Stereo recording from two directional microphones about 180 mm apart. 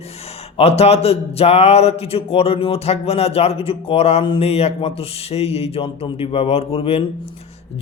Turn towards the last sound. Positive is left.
turn(degrees=30)  # may be behind; listen again after turning